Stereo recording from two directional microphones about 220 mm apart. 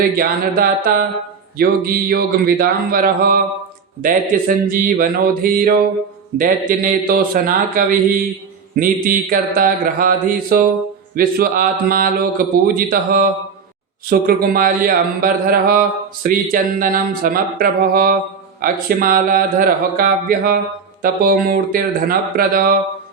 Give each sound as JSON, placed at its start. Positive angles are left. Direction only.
{"t": 0.0, "sound": "a man's voice", "side_deg": -40}